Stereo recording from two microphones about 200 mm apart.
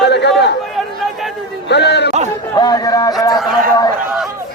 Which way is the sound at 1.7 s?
60° left (ahead or behind).